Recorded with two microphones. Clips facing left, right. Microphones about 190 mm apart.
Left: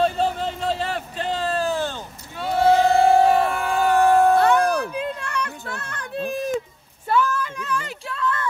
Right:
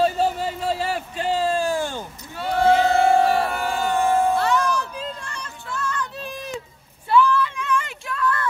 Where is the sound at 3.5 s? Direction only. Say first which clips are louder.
Left 2 dB; 35° right (ahead or behind).